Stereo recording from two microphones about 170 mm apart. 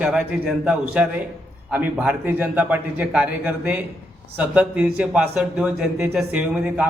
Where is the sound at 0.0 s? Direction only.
5° right (ahead or behind).